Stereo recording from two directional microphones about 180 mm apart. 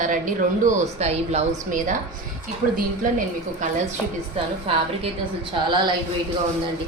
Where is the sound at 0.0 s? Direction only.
45° right (ahead or behind).